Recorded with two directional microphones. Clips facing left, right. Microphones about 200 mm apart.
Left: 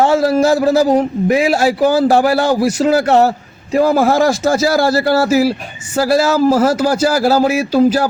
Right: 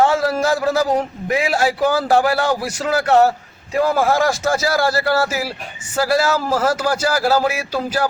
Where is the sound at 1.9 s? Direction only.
30° left (ahead or behind).